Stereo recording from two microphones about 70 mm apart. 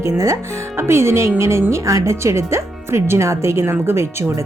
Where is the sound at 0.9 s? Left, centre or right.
Right.